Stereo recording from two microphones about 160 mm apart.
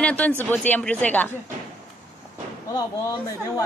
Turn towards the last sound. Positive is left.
turn(degrees=25)  # may be behind; listen again after turning